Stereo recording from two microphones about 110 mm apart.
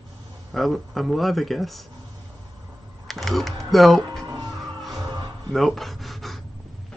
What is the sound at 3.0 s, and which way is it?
Typing, centre (ahead or behind).